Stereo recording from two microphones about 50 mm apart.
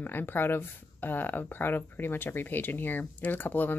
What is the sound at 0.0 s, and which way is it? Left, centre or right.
Speech, left.